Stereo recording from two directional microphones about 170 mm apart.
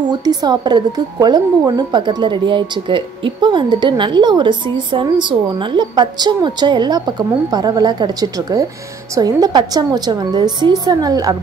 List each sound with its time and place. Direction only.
0.1 s speech: 25° right (ahead or behind)